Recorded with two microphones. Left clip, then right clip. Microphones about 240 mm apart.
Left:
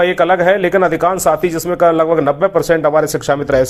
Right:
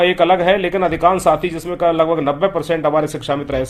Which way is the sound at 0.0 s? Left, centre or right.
Left.